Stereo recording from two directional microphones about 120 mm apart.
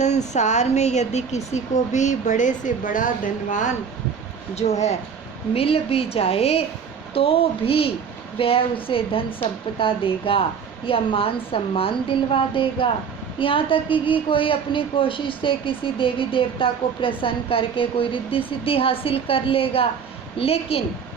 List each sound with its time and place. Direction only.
0.0 s speech: 75° left (ahead or behind)
1.5 s speech: 80° left
4.5 s speech: 65° left (ahead or behind)
5.5 s a woman's voice: 55° left (ahead or behind)